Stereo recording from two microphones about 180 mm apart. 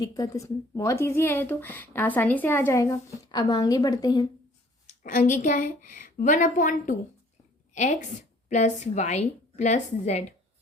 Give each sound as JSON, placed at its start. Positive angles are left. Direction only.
{"t": 0.0, "sound": "speech", "side_deg": 20}
{"t": 4.9, "sound": "a woman's voice", "side_deg": 45}